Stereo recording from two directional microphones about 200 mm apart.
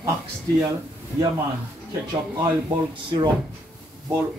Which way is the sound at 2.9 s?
25° right (ahead or behind).